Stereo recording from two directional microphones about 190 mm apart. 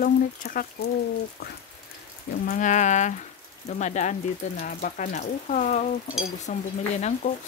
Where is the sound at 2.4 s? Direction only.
40° left (ahead or behind).